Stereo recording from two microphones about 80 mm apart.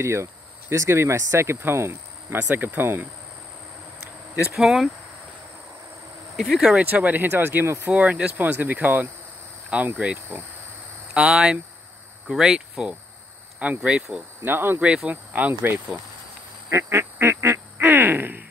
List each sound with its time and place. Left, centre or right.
0.0 s speech: right
2.3 s speech: right
4.6 s speech: centre
6.3 s speech: centre
6.7 s speech: centre
14.4 s speech: right
16.7 s quack: right